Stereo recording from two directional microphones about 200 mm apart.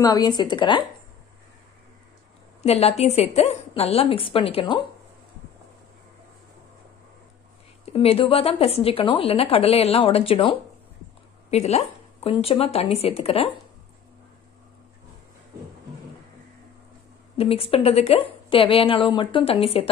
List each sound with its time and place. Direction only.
0.0 s speech: 20° left (ahead or behind)
2.6 s a woman's voice: 30° left (ahead or behind)
7.8 s speech: 30° left (ahead or behind)
17.4 s speech: 30° left (ahead or behind)